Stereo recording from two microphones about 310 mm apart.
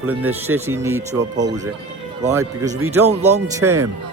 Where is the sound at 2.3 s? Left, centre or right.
Centre.